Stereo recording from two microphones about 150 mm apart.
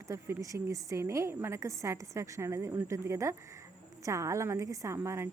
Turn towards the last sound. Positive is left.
turn(degrees=-20)  # may be behind; listen again after turning